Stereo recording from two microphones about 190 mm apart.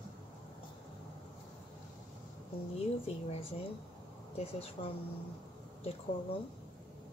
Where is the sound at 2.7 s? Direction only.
30° left (ahead or behind).